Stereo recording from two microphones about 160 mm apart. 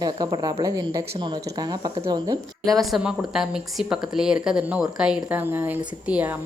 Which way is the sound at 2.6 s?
Centre (ahead or behind).